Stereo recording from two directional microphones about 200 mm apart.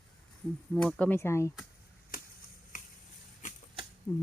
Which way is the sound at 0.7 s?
5° left (ahead or behind).